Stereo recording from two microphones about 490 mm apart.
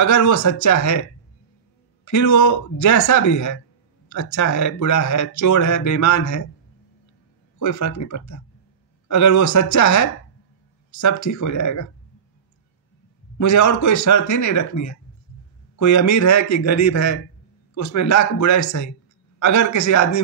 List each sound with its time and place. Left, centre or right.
0.0 s speech: left
2.0 s speech: left
7.5 s speech: left
13.4 s speech: left